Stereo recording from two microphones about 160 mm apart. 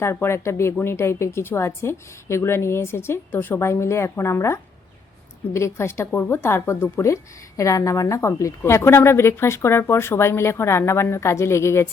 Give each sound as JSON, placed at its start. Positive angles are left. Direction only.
{"t": 0.0, "sound": "a woman's voice", "side_deg": 15}